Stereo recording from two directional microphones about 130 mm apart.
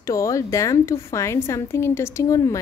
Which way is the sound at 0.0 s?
25° left (ahead or behind).